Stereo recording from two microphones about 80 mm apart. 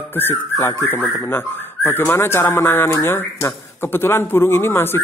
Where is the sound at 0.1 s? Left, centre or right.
Left.